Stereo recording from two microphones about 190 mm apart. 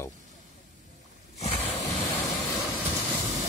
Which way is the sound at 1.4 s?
35° left (ahead or behind).